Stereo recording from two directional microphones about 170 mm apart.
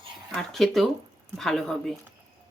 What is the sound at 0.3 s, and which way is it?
Speech, centre (ahead or behind).